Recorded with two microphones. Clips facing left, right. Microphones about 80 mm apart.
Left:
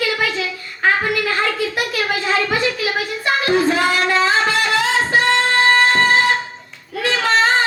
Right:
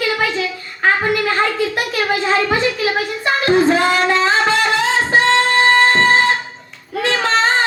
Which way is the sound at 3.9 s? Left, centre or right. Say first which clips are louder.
Right 1 dB; right.